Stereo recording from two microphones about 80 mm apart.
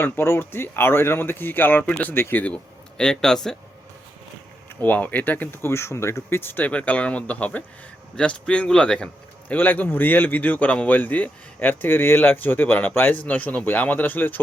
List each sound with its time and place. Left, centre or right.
0.0 s a man's voice: left
3.0 s a man's voice: centre
4.8 s a man's voice: left